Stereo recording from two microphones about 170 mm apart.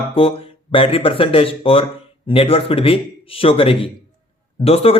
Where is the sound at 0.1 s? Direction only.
30° left (ahead or behind).